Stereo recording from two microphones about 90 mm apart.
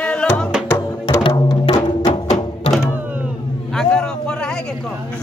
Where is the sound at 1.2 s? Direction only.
65° left (ahead or behind).